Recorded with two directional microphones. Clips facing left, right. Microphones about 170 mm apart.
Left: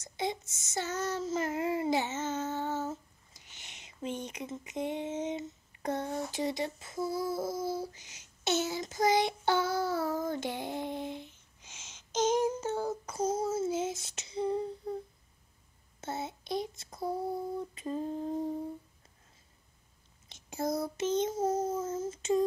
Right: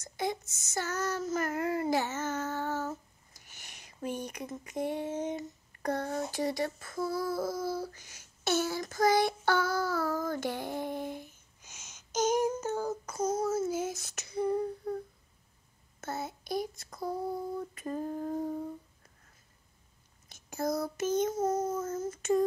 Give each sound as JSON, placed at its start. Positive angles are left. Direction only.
{"t": 0.0, "sound": "speech", "side_deg": 25}
{"t": 1.9, "sound": "child singing", "side_deg": 20}
{"t": 3.4, "sound": "speech", "side_deg": 20}
{"t": 11.1, "sound": "child singing", "side_deg": 25}
{"t": 14.3, "sound": "humming", "side_deg": 20}
{"t": 16.0, "sound": "speech", "side_deg": 25}
{"t": 20.4, "sound": "speech", "side_deg": 25}